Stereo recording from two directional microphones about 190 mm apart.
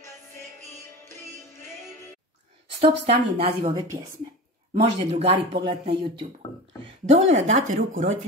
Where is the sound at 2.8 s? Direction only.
30° right (ahead or behind).